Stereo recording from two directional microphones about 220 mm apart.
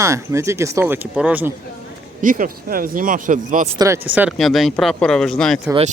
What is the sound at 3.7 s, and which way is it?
Speech, 15° right (ahead or behind).